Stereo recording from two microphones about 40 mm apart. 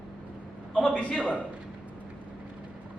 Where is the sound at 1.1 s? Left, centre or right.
Left.